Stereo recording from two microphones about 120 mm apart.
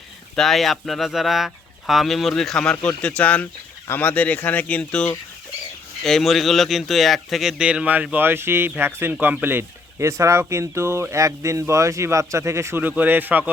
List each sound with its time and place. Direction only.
0.3 s speech: centre (ahead or behind); by 13.5 s 15° right (ahead or behind)